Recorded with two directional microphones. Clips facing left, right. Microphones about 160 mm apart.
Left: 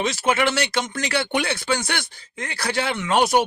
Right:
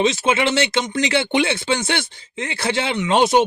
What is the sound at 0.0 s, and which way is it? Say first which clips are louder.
Speech: right 3 dB; 25° right (ahead or behind).